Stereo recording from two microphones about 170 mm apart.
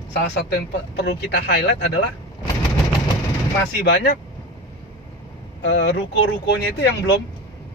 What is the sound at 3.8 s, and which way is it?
Speech, 75° left (ahead or behind).